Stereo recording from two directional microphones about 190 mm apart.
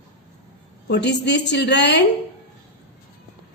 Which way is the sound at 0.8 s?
60° left (ahead or behind).